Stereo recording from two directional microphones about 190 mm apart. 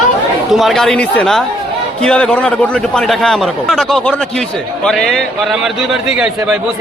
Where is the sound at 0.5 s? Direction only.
Centre (ahead or behind).